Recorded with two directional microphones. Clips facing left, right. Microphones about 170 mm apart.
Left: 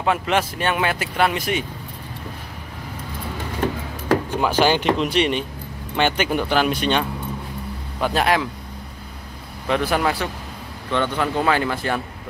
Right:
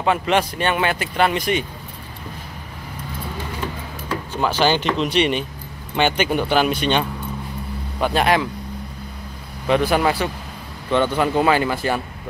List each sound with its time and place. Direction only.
0.0 s speech: centre (ahead or behind)
3.6 s a sound: 50° left (ahead or behind)
4.4 s speech: 10° left (ahead or behind)
9.7 s speech: centre (ahead or behind)